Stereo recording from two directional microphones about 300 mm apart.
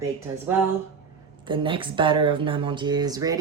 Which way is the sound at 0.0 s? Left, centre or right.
Centre.